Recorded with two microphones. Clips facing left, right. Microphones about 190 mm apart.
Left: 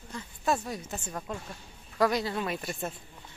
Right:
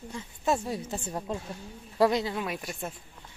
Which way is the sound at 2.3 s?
10° right (ahead or behind).